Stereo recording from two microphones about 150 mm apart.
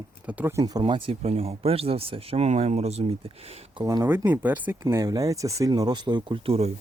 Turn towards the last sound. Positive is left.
turn(degrees=-40)  # may be behind; listen again after turning